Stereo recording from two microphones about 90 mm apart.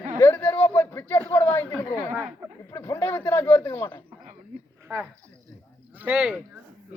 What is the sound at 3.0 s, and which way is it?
A man's voice, 25° left (ahead or behind).